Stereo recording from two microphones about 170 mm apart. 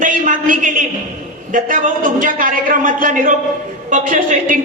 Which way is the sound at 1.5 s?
50° right (ahead or behind).